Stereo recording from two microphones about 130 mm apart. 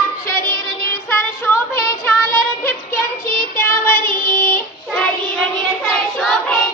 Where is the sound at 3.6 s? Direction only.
15° left (ahead or behind).